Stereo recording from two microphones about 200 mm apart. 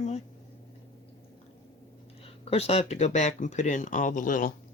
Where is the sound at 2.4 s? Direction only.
30° left (ahead or behind).